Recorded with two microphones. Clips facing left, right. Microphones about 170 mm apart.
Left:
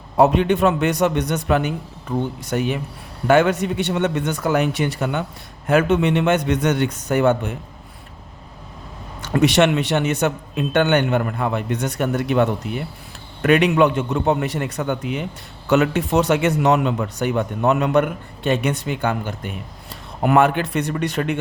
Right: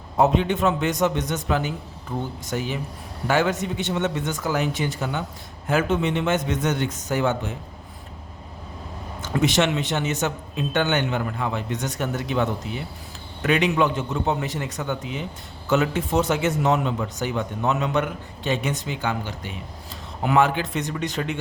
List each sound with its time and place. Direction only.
0.2 s a man's voice: 65° left (ahead or behind)
9.3 s a man's voice: 65° left (ahead or behind)